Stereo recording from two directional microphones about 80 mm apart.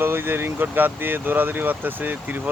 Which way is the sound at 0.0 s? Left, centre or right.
Right.